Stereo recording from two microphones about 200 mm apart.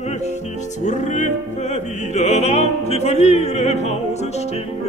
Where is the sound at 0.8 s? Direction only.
40° left (ahead or behind).